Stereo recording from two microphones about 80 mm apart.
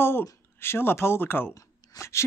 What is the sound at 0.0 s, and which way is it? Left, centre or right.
Speech, left.